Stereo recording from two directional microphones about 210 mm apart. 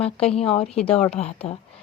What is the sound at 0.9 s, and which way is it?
Speech, 30° left (ahead or behind).